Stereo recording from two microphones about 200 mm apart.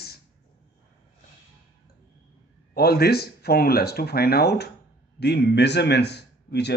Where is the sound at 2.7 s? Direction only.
50° left (ahead or behind).